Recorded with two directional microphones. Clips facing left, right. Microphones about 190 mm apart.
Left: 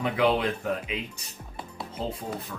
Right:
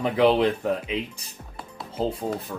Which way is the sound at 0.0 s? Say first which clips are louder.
Right 5 dB; 30° right (ahead or behind).